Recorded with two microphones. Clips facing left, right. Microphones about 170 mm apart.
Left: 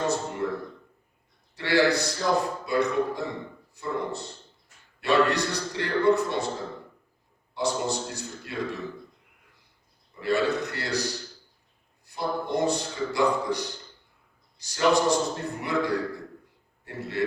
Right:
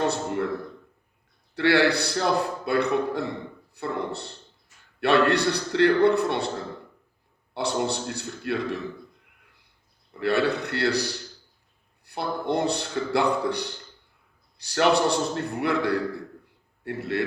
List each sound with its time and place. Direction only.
0.0 s a sound: 65° right (ahead or behind)
1.5 s a man's voice: 65° right (ahead or behind)
7.5 s a man's voice: 65° right (ahead or behind)
10.2 s a man's voice: 65° right (ahead or behind)